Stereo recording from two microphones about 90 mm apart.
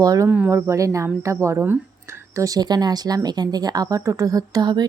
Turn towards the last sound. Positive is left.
turn(degrees=-40)  # may be behind; listen again after turning